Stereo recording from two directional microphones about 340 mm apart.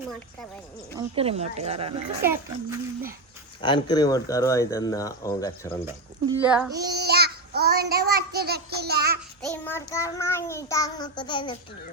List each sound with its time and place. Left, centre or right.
0.9 s speech: centre
2.2 s speech: centre
3.6 s speech: centre
5.8 s speech: centre
6.7 s child singing: right
9.5 s speech: centre